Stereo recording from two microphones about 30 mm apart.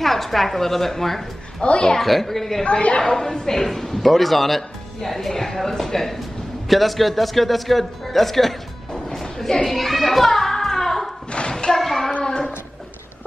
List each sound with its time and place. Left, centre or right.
0.0 s a woman's voice: centre
1.6 s speech: left
2.0 s a woman's voice: centre
9.8 s a child's voice: centre
10.5 s music: centre
11.4 s thump: left
11.7 s child singing: centre